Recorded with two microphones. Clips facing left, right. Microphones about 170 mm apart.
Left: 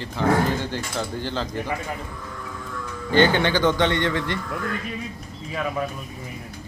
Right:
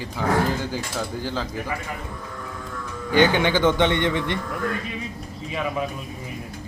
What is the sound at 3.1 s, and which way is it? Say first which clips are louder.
Speech: even; 15° right (ahead or behind).